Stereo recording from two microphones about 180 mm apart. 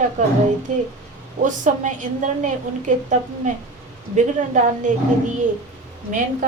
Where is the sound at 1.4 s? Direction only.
45° right (ahead or behind).